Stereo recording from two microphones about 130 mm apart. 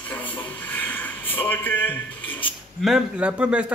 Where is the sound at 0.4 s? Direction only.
15° left (ahead or behind).